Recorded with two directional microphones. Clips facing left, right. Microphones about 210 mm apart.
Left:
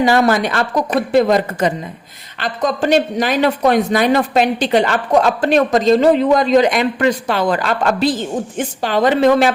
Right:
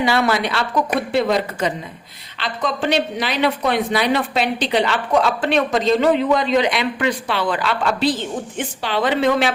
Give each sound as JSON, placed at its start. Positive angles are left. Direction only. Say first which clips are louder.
{"t": 0.0, "sound": "speech", "louder": "left 5 dB", "side_deg": 45}